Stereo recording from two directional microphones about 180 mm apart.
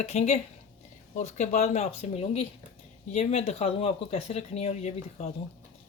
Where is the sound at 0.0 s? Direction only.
40° left (ahead or behind).